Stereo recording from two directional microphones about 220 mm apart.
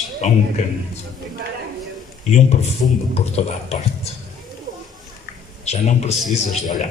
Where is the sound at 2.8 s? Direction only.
25° left (ahead or behind).